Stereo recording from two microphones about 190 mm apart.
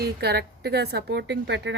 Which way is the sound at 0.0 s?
55° right (ahead or behind).